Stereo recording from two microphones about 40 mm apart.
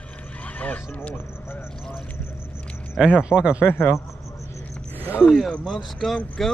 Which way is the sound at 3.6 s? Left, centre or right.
Left.